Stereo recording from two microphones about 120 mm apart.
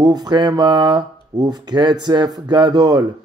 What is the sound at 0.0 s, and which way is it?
Speech, 35° right (ahead or behind).